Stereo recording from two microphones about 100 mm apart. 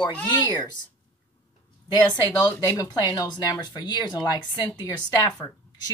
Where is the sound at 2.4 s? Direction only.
40° left (ahead or behind).